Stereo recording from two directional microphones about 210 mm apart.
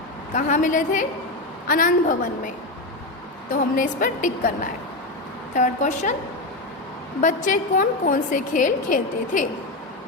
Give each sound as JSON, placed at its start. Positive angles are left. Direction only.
{"t": 0.3, "sound": "a woman's voice", "side_deg": 35}
{"t": 3.5, "sound": "a woman's voice", "side_deg": 40}
{"t": 5.5, "sound": "a woman's voice", "side_deg": 35}
{"t": 7.2, "sound": "a woman's voice", "side_deg": 40}